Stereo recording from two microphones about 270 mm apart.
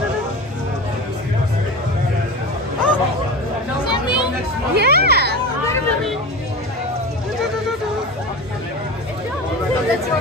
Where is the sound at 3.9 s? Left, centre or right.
Centre.